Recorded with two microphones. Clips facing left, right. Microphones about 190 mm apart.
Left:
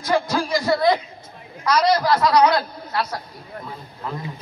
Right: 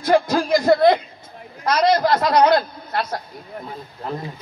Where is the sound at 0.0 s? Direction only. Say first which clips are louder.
Right 4 dB; 50° right (ahead or behind).